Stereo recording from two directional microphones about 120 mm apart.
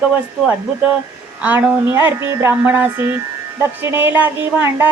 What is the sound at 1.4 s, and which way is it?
Speech, 15° right (ahead or behind).